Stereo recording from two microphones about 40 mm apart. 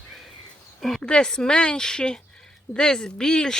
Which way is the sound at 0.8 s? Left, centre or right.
Centre.